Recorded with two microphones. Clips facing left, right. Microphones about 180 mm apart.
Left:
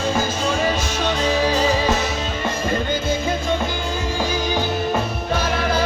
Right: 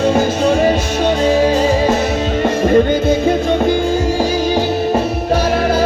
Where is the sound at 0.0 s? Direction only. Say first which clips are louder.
Right 8 dB; 65° right (ahead or behind).